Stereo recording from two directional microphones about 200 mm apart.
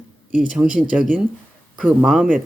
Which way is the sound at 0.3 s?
5° right (ahead or behind).